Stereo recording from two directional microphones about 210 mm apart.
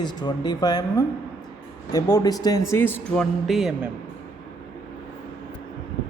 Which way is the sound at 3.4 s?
Centre (ahead or behind).